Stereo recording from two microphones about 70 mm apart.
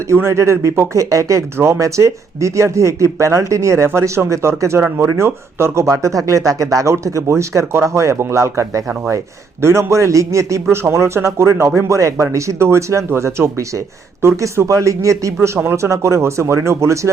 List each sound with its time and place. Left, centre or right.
0.1 s a man's voice: right
1.5 s speech: right
1.8 s a man's voice: right